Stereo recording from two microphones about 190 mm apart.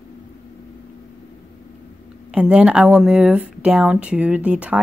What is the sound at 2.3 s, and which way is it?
Speech, 5° right (ahead or behind).